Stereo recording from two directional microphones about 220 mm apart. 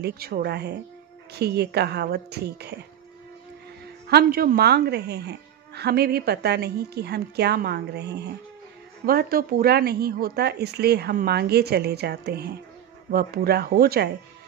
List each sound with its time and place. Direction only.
0.0 s a woman's voice: 45° right (ahead or behind)
4.1 s a woman's voice: 45° right (ahead or behind)